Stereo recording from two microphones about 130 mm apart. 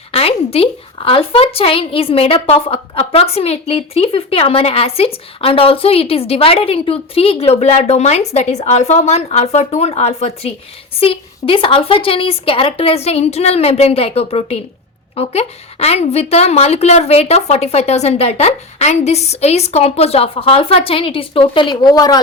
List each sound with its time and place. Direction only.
0.1 s a woman's voice: 50° left (ahead or behind); by 22.2 s 30° left (ahead or behind)